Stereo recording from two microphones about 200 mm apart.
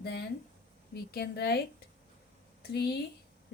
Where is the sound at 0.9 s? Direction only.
55° left (ahead or behind).